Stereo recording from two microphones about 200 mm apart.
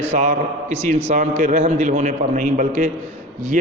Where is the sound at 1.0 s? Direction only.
35° right (ahead or behind).